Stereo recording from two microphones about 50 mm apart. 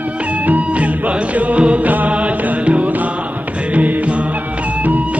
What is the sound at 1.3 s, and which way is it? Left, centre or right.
Music, right.